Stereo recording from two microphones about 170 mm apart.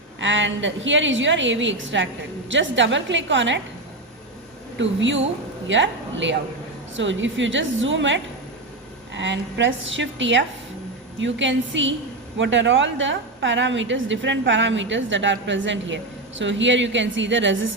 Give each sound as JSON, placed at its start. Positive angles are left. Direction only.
{"t": 0.2, "sound": "a woman's voice", "side_deg": -90}
{"t": 4.8, "sound": "a woman's voice", "side_deg": -90}